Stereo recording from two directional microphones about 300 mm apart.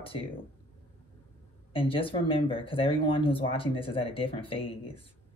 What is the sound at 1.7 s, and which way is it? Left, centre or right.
Speech, centre.